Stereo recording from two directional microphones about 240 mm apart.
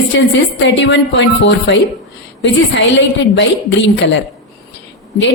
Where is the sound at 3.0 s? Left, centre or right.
Left.